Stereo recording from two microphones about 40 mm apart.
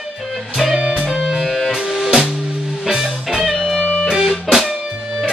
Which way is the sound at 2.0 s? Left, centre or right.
Right.